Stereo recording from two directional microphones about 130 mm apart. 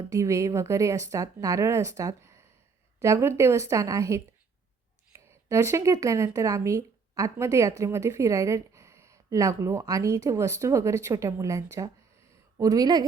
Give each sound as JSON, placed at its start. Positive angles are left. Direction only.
{"t": 0.1, "sound": "speech", "side_deg": -25}
{"t": 5.5, "sound": "speech", "side_deg": -20}